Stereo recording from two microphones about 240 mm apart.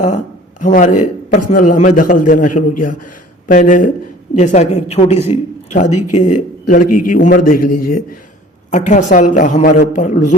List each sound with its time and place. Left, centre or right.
0.6 s a woman's voice: left